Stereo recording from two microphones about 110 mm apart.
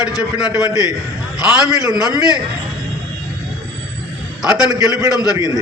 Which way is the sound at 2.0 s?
35° left (ahead or behind).